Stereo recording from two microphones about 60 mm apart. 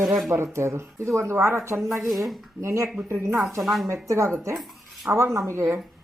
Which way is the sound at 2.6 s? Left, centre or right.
Right.